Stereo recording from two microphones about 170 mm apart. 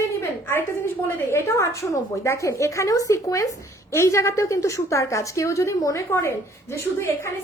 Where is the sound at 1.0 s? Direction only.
15° left (ahead or behind).